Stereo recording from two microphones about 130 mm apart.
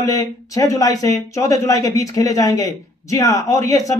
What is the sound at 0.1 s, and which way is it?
A man's voice, 25° left (ahead or behind).